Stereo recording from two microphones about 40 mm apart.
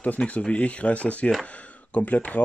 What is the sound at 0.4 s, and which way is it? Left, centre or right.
Speech, left.